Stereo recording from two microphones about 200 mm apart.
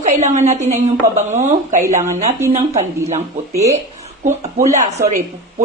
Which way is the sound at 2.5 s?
35° right (ahead or behind).